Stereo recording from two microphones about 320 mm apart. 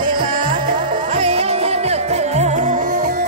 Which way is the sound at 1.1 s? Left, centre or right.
Centre.